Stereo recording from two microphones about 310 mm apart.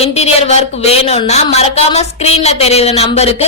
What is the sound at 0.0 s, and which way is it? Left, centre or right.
A woman's voice, centre.